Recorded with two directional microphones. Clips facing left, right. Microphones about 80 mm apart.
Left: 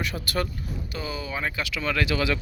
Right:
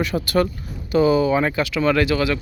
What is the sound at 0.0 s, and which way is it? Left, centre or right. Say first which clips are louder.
Speech: right 9 dB; right.